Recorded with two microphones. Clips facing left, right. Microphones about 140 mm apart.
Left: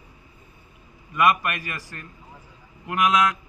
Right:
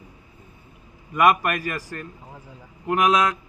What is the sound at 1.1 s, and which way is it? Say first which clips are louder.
Speech: right 3 dB; 35° right (ahead or behind).